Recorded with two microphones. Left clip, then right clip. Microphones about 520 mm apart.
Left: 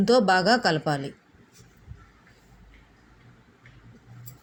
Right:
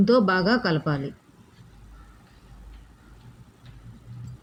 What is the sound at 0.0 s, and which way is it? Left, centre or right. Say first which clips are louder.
Speech: left 1 dB; right.